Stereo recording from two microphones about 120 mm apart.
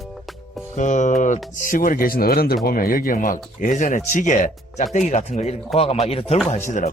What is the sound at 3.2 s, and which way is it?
Speech, 90° left.